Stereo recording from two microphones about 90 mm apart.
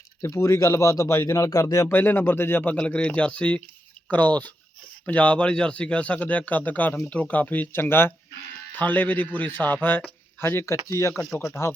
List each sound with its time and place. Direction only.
0.2 s speech: 35° left (ahead or behind)
1.9 s speech: 25° left (ahead or behind)
2.7 s a man's voice: 10° left (ahead or behind); by 11.1 s 30° left (ahead or behind)
11.1 s speech: 5° left (ahead or behind)
11.3 s speech: 30° left (ahead or behind)